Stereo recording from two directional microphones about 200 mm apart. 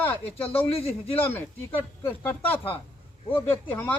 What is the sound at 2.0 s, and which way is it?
Speech, 10° left (ahead or behind).